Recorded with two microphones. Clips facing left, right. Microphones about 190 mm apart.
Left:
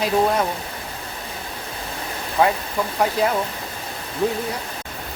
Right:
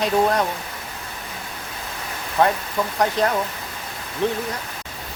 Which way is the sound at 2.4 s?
5° left (ahead or behind).